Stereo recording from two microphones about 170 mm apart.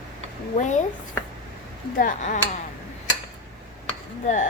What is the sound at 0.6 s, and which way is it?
Speech, 45° left (ahead or behind).